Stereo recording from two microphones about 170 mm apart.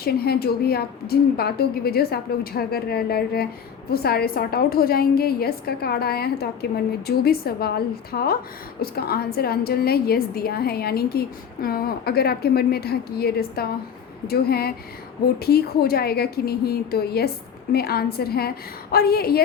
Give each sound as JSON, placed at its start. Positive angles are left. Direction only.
{"t": 0.0, "sound": "a woman's voice", "side_deg": 65}